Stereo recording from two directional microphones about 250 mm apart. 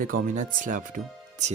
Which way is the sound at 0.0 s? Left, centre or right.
Right.